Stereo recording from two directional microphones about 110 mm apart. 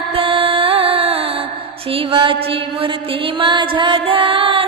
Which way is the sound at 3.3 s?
45° right (ahead or behind).